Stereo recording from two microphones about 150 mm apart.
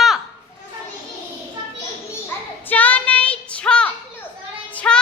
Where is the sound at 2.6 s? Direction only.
10° left (ahead or behind).